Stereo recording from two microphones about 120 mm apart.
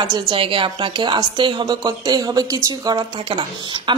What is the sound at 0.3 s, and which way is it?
Speech, 45° right (ahead or behind).